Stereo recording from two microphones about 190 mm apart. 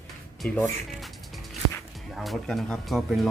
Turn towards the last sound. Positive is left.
turn(degrees=0)  # may be behind; listen again after turning